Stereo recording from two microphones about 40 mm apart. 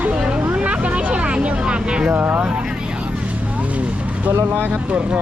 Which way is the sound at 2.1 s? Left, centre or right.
Right.